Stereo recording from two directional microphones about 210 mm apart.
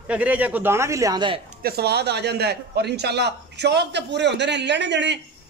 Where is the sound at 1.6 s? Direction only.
50° right (ahead or behind).